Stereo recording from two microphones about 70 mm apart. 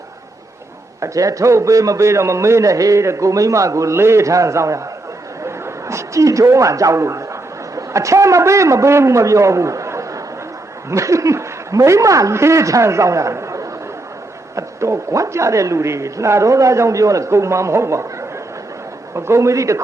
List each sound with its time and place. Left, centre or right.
1.0 s a woman's voice: right